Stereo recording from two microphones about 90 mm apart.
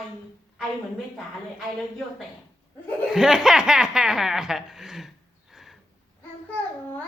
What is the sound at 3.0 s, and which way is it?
Speech, 5° right (ahead or behind).